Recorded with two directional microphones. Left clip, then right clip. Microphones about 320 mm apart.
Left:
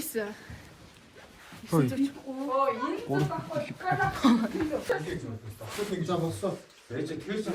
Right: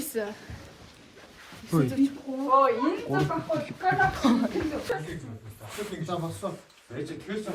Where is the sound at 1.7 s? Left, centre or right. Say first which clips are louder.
Even; centre.